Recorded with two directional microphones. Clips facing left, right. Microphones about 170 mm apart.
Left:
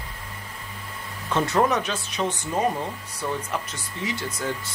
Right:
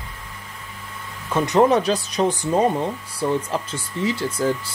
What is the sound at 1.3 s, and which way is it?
Speech, 15° right (ahead or behind).